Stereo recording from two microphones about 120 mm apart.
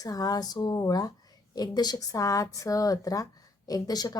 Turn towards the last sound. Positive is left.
turn(degrees=35)  # may be behind; listen again after turning